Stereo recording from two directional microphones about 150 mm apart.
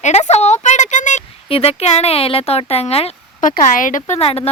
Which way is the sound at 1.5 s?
40° left (ahead or behind).